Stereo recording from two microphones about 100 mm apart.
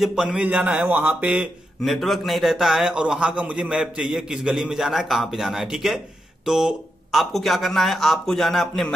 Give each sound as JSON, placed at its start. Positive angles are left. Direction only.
{"t": 0.0, "sound": "a man's voice", "side_deg": -5}
{"t": 0.5, "sound": "a man's voice", "side_deg": -15}
{"t": 1.9, "sound": "a man's voice", "side_deg": 0}